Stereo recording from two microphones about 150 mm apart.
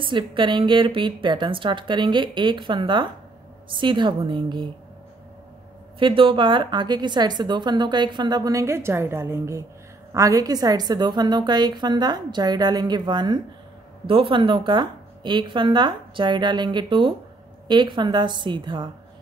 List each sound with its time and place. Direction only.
0.0 s a woman's voice: 35° right (ahead or behind)
5.9 s a woman's voice: 35° right (ahead or behind)